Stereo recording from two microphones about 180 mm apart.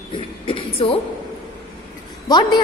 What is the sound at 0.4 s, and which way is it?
Music, 30° left (ahead or behind).